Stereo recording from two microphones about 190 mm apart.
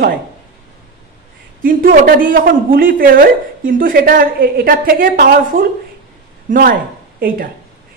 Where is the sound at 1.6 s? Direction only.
50° right (ahead or behind).